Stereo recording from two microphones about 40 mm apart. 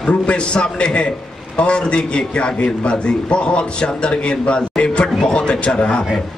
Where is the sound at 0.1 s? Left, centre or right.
Left.